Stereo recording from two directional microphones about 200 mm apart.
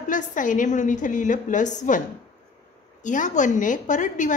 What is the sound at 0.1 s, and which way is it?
A woman's voice, 40° left (ahead or behind).